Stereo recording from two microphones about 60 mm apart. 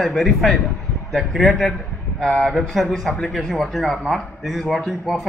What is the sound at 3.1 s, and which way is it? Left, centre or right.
Speech, centre.